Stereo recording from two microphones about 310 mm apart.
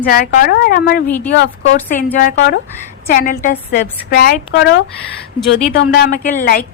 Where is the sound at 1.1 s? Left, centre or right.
Centre.